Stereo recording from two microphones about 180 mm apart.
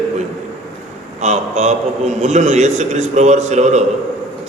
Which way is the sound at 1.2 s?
40° right (ahead or behind).